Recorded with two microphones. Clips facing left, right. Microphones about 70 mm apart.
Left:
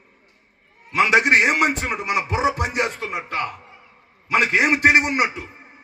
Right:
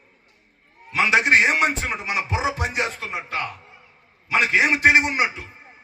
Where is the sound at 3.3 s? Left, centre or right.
Left.